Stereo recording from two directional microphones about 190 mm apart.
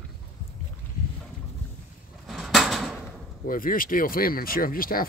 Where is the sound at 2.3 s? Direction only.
Centre (ahead or behind).